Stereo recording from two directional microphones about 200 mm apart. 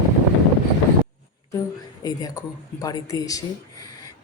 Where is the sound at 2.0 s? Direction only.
20° left (ahead or behind).